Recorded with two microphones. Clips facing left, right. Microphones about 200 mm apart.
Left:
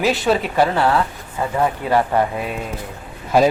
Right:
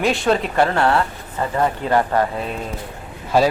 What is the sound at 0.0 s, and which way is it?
Speech, 5° left (ahead or behind).